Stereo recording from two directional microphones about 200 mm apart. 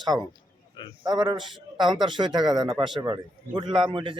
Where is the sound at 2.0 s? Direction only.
25° right (ahead or behind).